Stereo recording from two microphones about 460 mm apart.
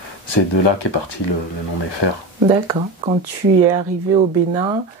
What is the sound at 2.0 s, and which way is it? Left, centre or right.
Speech, left.